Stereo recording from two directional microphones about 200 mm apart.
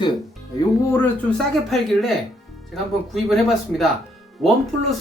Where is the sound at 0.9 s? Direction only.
5° left (ahead or behind).